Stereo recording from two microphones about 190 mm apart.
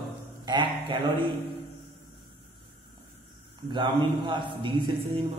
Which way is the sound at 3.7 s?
25° right (ahead or behind).